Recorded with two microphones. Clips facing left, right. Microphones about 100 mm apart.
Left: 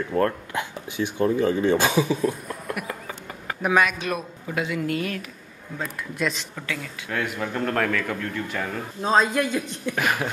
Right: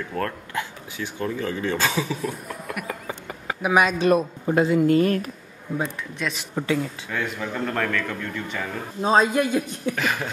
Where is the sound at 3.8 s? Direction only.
35° right (ahead or behind).